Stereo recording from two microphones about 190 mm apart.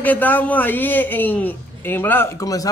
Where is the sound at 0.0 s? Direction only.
10° left (ahead or behind).